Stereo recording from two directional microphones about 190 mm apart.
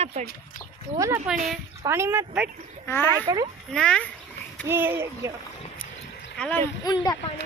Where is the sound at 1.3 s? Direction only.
5° right (ahead or behind).